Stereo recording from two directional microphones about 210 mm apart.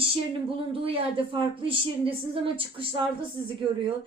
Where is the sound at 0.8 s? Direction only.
25° right (ahead or behind).